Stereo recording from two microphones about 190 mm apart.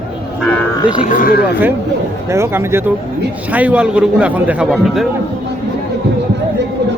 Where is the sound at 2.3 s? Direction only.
15° right (ahead or behind).